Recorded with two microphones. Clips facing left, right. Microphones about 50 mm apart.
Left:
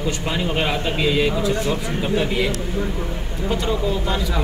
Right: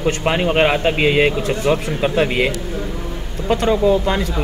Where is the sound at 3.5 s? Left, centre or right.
Right.